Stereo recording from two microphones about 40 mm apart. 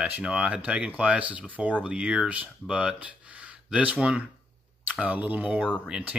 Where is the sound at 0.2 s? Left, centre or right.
Right.